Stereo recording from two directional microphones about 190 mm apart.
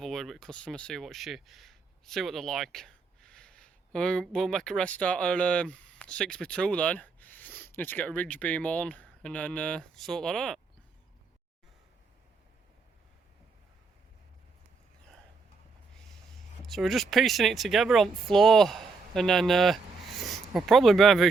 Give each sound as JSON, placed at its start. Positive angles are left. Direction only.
{"t": 0.0, "sound": "speech", "side_deg": 0}
{"t": 16.6, "sound": "speech", "side_deg": 0}